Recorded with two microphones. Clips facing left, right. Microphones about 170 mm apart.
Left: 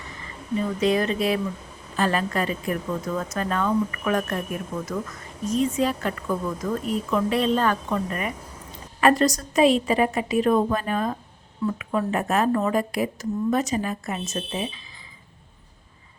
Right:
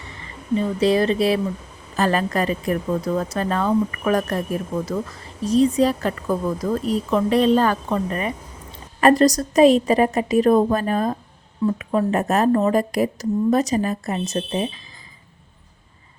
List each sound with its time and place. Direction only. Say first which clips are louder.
0.6 s speech: right 4 dB; 30° right (ahead or behind)